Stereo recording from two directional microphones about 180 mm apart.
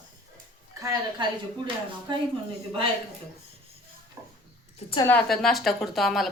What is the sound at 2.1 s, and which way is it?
Speech, 25° right (ahead or behind).